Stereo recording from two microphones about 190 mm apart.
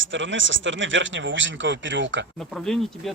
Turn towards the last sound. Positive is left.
turn(degrees=0)  # may be behind; listen again after turning